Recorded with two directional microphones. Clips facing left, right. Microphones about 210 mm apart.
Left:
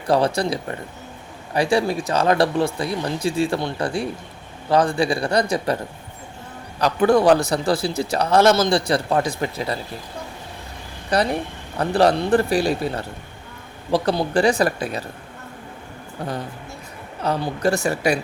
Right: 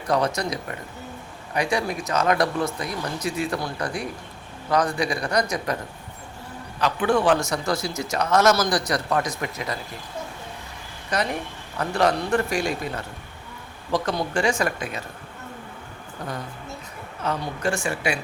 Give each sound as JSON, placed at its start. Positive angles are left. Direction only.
{"t": 0.1, "sound": "a man's voice", "side_deg": 30}
{"t": 6.7, "sound": "a man's voice", "side_deg": 40}
{"t": 11.1, "sound": "a man's voice", "side_deg": 35}
{"t": 17.2, "sound": "a man's voice", "side_deg": 35}